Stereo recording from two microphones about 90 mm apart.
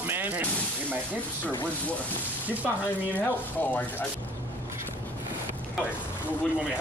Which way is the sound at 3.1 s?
20° left (ahead or behind).